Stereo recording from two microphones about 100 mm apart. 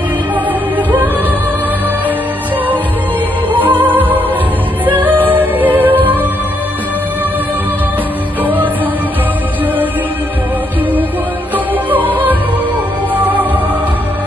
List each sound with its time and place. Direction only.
0.5 s music: 15° right (ahead or behind)
3.5 s music: 20° right (ahead or behind)
11.5 s music: 20° right (ahead or behind)